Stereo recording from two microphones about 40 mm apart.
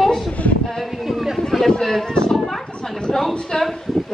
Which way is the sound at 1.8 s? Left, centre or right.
Centre.